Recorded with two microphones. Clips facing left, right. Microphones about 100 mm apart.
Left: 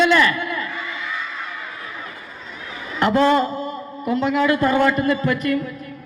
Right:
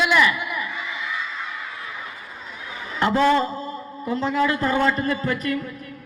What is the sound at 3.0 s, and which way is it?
A woman's voice, 30° right (ahead or behind).